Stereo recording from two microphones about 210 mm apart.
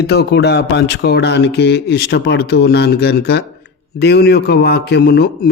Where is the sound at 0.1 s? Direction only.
50° left (ahead or behind).